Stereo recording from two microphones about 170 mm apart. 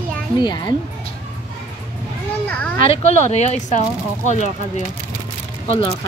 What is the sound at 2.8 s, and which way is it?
Speech, 35° left (ahead or behind).